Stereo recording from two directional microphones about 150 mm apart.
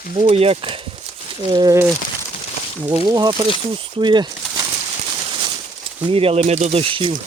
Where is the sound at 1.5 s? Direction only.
30° right (ahead or behind).